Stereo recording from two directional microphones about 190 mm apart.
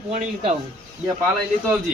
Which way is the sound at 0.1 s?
35° right (ahead or behind).